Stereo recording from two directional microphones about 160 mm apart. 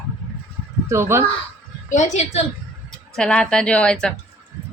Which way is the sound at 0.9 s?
15° right (ahead or behind).